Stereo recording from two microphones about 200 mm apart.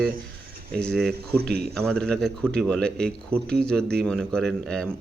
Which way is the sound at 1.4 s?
55° right (ahead or behind).